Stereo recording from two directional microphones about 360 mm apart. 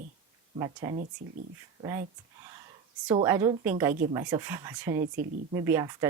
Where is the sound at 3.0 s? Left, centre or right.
Centre.